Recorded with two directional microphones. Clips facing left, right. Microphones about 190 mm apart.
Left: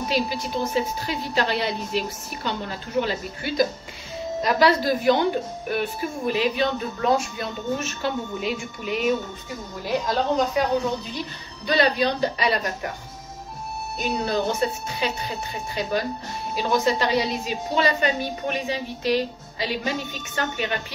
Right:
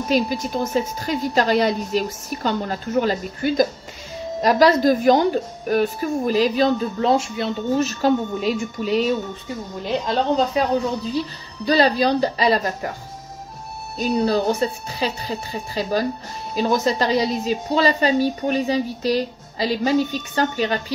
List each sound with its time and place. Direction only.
0.1 s a woman's voice: 45° right (ahead or behind)
7.0 s speech: 25° right (ahead or behind)
7.8 s a woman's voice: 40° right (ahead or behind)
9.8 s speech: 25° right (ahead or behind)
11.6 s a woman's voice: 35° right (ahead or behind)
13.9 s a woman's voice: 35° right (ahead or behind)